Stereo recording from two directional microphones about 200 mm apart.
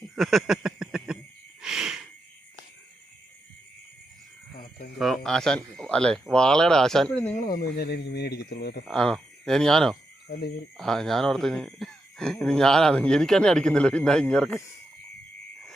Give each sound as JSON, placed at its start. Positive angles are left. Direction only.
{"t": 0.2, "sound": "a sound", "side_deg": 0}
{"t": 4.5, "sound": "a sound", "side_deg": 45}
{"t": 4.9, "sound": "speech", "side_deg": 0}
{"t": 7.3, "sound": "speech", "side_deg": 50}
{"t": 8.9, "sound": "speech", "side_deg": 5}
{"t": 10.2, "sound": "speech", "side_deg": 50}
{"t": 10.8, "sound": "speech", "side_deg": 0}